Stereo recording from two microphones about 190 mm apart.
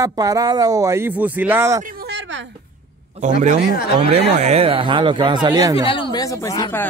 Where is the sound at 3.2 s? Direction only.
40° right (ahead or behind); by 5.8 s 20° right (ahead or behind).